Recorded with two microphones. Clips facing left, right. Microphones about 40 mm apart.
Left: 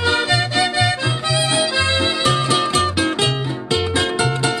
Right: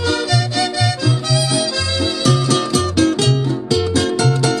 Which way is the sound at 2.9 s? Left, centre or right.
Left.